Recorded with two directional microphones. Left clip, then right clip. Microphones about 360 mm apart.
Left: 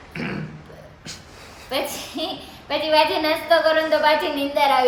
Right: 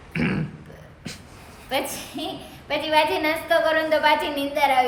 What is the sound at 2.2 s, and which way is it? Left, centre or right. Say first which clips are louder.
A woman's voice: left 4 dB; centre.